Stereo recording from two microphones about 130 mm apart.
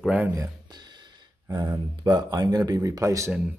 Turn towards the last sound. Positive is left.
turn(degrees=-25)  # may be behind; listen again after turning